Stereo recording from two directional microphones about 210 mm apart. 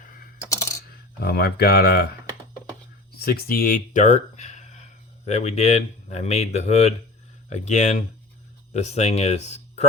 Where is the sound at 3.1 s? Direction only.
45° left (ahead or behind).